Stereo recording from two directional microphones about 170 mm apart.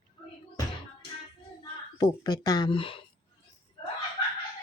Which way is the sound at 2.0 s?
25° left (ahead or behind).